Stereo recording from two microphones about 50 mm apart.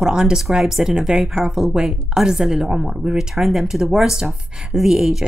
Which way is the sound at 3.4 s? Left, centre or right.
Centre.